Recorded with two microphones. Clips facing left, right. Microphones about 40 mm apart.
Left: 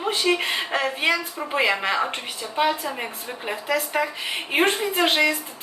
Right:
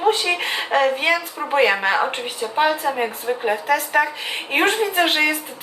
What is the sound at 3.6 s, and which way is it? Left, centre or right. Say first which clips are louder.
Speech: right 4 dB; right.